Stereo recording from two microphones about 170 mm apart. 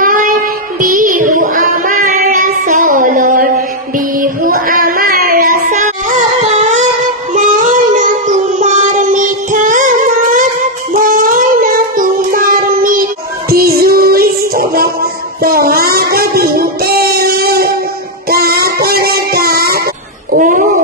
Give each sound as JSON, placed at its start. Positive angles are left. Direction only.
{"t": 0.0, "sound": "child singing", "side_deg": -50}
{"t": 4.2, "sound": "music", "side_deg": -55}
{"t": 7.3, "sound": "child singing", "side_deg": -50}
{"t": 20.3, "sound": "a sound", "side_deg": -50}